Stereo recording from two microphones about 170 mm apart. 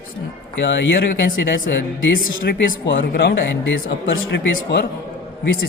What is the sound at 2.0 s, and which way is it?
Speech, 80° left.